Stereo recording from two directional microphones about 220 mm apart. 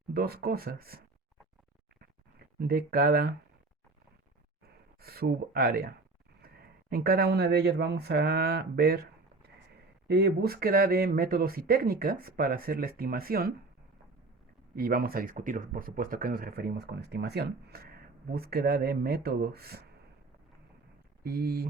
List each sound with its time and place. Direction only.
0.1 s speech: 45° right (ahead or behind)
2.6 s speech: 45° right (ahead or behind)
4.9 s speech: 45° right (ahead or behind)
14.8 s speech: 40° right (ahead or behind)
21.2 s speech: 45° right (ahead or behind)